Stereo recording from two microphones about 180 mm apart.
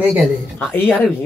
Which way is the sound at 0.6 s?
10° left (ahead or behind).